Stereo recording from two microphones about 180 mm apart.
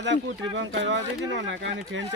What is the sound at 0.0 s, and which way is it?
Speech, 80° right.